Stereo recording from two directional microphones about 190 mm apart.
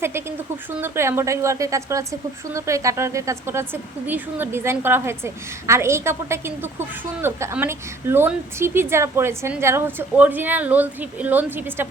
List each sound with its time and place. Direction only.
0.0 s a woman's voice: 15° right (ahead or behind)